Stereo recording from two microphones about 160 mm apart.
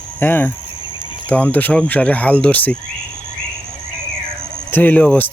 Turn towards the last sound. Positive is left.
turn(degrees=10)  # may be behind; listen again after turning